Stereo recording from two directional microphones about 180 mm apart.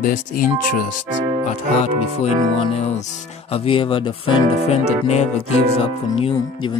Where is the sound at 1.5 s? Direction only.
35° left (ahead or behind).